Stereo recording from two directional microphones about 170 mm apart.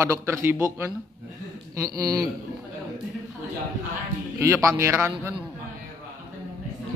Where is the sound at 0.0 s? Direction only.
15° right (ahead or behind).